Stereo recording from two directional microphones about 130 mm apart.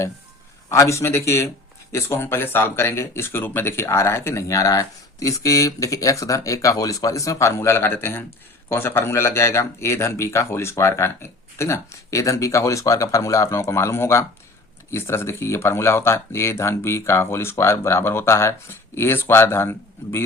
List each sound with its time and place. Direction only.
0.7 s speech: 20° left (ahead or behind)